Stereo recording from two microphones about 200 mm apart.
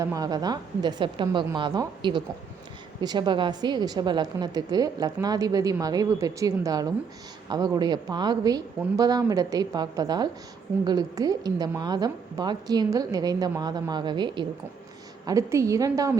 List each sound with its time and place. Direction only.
0.0 s a woman's voice: 15° right (ahead or behind)